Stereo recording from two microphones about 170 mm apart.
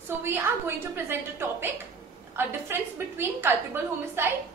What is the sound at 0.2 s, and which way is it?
A woman's voice, 15° right (ahead or behind).